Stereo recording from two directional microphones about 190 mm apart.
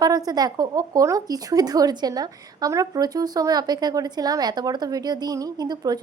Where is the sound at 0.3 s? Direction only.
20° right (ahead or behind).